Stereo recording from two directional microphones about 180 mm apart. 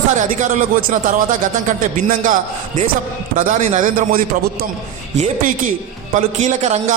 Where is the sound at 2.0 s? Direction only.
45° right (ahead or behind).